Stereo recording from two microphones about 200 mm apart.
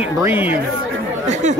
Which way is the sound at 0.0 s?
10° right (ahead or behind).